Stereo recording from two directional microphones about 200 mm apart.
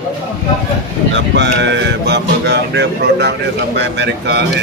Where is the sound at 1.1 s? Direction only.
65° right (ahead or behind).